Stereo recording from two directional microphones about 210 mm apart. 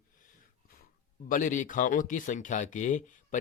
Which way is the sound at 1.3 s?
40° left (ahead or behind).